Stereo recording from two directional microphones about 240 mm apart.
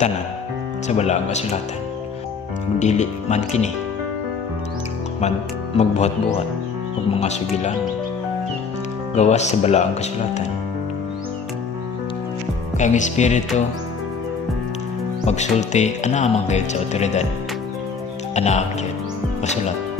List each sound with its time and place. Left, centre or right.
0.8 s speech: left
2.8 s speech: left
5.8 s speech: left
9.1 s speech: left
12.7 s speech: left
15.2 s speech: left
18.3 s speech: left